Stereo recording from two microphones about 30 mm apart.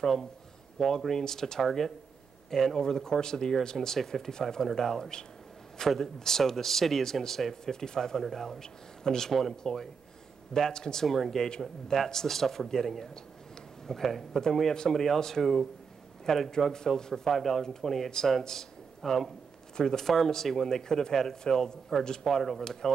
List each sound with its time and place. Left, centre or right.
0.0 s a man's voice: centre
1.1 s a man's voice: centre
7.7 s speech: left
8.2 s a man's voice: centre
8.5 s a man's voice: centre
9.3 s a man's voice: centre
9.6 s speech: left
11.1 s a man's voice: centre
16.4 s speech: centre
17.3 s a man's voice: centre
22.6 s speech: centre